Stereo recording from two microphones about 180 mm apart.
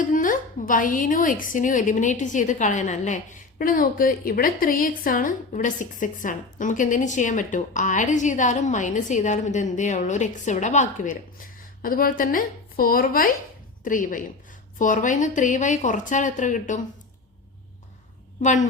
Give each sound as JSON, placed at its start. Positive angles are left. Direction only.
{"t": 0.0, "sound": "a woman's voice", "side_deg": 50}
{"t": 3.6, "sound": "a woman's voice", "side_deg": 50}
{"t": 18.4, "sound": "a woman's voice", "side_deg": 45}